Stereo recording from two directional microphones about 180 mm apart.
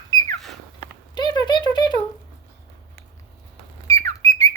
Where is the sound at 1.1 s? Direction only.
25° left (ahead or behind).